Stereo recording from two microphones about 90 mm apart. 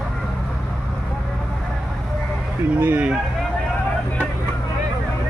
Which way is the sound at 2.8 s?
20° right (ahead or behind).